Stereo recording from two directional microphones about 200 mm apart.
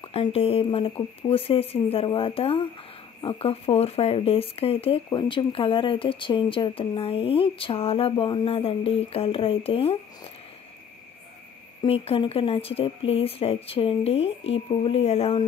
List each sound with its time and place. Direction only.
0.1 s speech: 30° left (ahead or behind)
11.8 s speech: 30° left (ahead or behind)